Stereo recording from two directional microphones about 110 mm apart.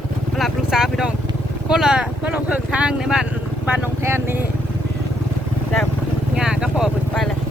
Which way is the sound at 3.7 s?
25° right (ahead or behind).